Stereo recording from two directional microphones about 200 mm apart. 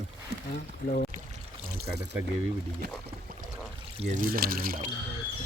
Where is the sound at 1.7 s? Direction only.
55° right (ahead or behind).